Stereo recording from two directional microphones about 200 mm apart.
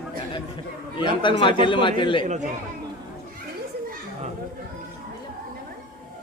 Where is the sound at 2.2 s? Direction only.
35° right (ahead or behind).